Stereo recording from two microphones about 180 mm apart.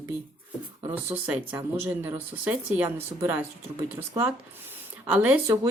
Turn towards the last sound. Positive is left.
turn(degrees=-10)  # may be behind; listen again after turning